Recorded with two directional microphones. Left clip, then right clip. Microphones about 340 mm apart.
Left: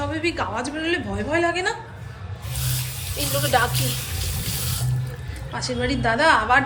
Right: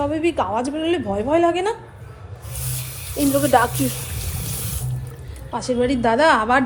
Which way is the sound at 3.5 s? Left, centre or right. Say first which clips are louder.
Right 4 dB; centre.